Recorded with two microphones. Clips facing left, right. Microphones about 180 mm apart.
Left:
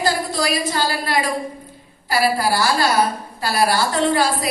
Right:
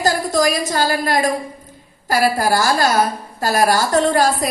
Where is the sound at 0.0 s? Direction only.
45° right (ahead or behind).